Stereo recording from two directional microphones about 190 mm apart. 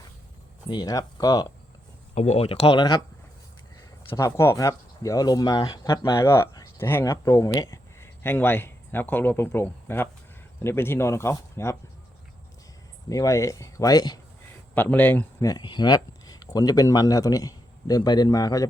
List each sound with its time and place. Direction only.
0.7 s speech: 20° left (ahead or behind)
2.1 s speech: 35° left (ahead or behind)
4.1 s speech: 15° left (ahead or behind)
13.1 s speech: 15° left (ahead or behind)
14.8 s speech: 10° left (ahead or behind)